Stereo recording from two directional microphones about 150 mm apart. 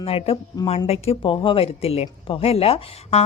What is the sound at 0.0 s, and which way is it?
A woman's voice, 40° left (ahead or behind).